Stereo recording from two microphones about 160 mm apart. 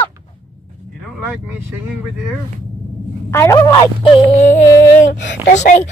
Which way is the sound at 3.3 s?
15° left (ahead or behind).